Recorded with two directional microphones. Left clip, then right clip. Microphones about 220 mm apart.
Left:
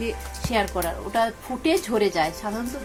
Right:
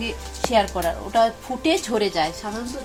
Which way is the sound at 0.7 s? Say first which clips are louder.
Right 4 dB; 20° right (ahead or behind).